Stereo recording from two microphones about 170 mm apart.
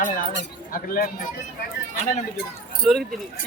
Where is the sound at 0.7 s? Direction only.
55° left (ahead or behind).